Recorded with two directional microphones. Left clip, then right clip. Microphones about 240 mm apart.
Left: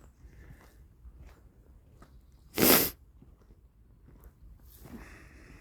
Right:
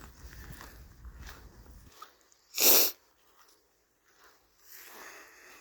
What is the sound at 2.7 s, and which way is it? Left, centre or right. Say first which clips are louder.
Sneeze: left 1 dB; left.